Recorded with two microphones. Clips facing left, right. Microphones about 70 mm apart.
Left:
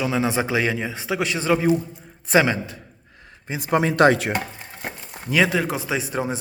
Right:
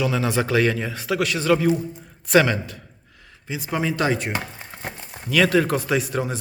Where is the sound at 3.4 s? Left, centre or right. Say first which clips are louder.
Left 4 dB; left.